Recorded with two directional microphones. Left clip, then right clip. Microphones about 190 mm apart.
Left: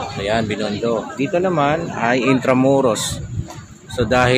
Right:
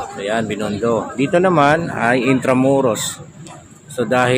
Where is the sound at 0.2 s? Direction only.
Centre (ahead or behind).